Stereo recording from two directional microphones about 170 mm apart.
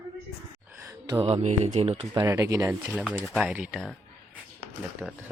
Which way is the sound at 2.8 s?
5° right (ahead or behind).